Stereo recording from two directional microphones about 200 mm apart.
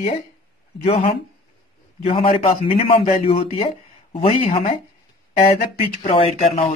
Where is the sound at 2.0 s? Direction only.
30° left (ahead or behind).